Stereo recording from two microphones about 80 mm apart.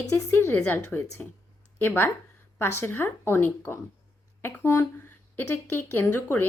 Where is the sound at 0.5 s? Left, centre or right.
Left.